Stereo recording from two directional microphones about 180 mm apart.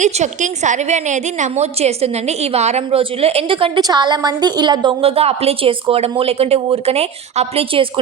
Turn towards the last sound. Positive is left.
turn(degrees=-30)  # may be behind; listen again after turning